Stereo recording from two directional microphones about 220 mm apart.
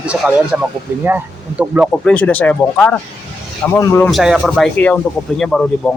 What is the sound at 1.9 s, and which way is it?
Speech, 5° left (ahead or behind).